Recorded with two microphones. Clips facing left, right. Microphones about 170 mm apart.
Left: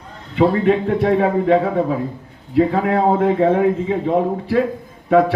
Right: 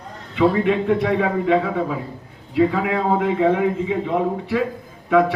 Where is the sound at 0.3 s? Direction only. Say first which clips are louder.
Left 2 dB; 40° left (ahead or behind).